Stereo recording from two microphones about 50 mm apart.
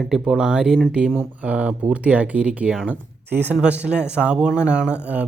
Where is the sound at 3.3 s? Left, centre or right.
Right.